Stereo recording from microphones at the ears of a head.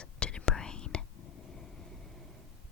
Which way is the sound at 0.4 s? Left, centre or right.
Left.